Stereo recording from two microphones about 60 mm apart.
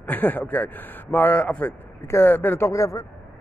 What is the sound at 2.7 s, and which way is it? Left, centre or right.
Speech, left.